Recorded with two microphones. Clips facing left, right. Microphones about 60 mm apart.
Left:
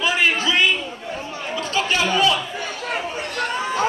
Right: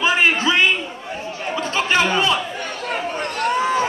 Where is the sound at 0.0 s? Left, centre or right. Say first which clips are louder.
Right 3 dB; right.